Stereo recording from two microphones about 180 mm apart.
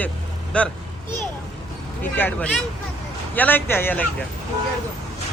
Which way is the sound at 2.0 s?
10° left (ahead or behind).